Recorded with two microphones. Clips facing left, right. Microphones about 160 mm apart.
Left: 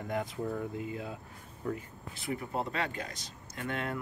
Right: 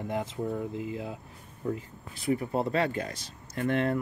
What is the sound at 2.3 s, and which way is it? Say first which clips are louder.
Speech: right 7 dB; 30° right (ahead or behind).